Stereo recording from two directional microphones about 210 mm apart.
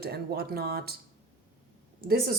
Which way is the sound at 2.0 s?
45° right (ahead or behind).